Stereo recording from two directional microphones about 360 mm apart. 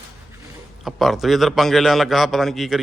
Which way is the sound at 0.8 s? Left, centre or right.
Centre.